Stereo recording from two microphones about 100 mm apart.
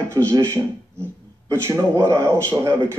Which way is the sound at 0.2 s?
45° right (ahead or behind).